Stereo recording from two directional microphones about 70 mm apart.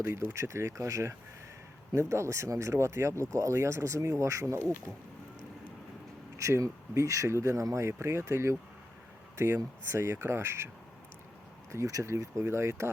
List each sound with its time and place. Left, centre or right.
0.0 s speech: right
6.3 s speech: right
9.9 s speech: right
11.7 s speech: right